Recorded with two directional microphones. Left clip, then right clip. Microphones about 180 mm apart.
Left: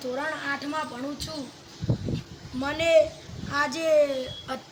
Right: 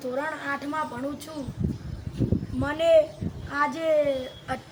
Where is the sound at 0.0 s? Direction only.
15° left (ahead or behind).